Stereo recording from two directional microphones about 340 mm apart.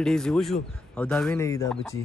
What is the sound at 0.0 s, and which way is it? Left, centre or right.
Speech, centre.